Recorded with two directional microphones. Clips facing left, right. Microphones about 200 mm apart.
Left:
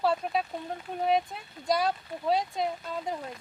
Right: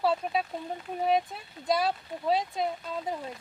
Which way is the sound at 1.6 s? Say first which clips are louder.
Even; centre (ahead or behind).